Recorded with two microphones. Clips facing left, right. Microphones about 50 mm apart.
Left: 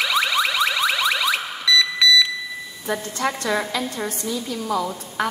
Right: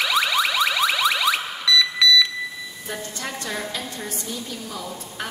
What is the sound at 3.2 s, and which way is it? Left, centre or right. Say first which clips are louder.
A woman's voice: left 8 dB; left.